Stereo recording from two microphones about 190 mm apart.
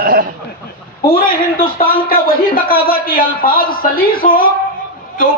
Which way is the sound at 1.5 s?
50° left (ahead or behind).